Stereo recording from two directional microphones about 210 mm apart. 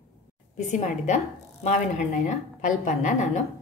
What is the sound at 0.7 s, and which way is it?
A woman's voice, 35° left (ahead or behind).